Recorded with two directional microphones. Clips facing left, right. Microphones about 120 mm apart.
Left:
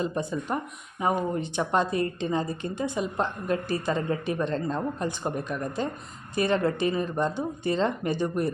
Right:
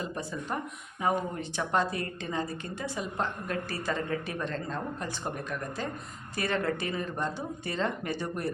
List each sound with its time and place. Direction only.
0.0 s a woman's voice: 20° left (ahead or behind)